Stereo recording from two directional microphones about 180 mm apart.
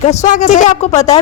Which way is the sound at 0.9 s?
15° left (ahead or behind).